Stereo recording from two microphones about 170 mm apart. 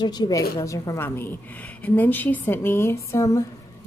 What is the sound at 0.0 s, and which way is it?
A woman's voice, 25° left (ahead or behind).